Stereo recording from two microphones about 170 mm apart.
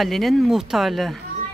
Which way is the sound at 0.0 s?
Centre (ahead or behind).